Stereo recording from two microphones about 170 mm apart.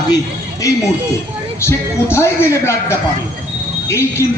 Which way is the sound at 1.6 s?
15° left (ahead or behind).